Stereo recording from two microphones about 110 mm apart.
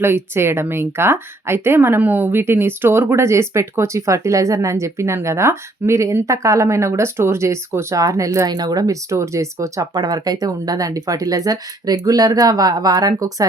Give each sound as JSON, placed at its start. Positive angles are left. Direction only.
{"t": 0.0, "sound": "speech", "side_deg": -20}